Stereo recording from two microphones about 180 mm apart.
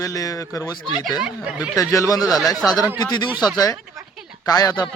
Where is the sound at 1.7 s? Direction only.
20° left (ahead or behind).